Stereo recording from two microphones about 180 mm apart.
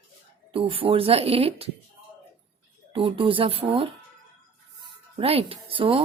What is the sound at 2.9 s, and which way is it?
Speech, 30° right (ahead or behind).